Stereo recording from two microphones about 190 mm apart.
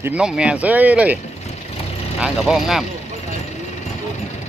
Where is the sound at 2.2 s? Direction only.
Centre (ahead or behind).